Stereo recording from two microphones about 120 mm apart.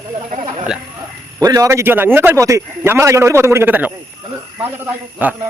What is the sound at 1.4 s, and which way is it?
A man's voice, 30° right (ahead or behind).